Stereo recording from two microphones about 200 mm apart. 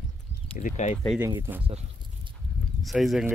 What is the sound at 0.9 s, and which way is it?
Speech, 5° left (ahead or behind).